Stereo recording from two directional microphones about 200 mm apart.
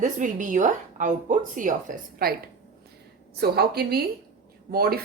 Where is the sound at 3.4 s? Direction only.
50° right (ahead or behind).